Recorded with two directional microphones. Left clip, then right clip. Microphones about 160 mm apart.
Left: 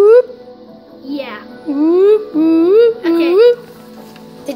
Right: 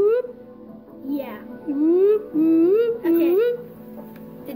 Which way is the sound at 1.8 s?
35° left (ahead or behind).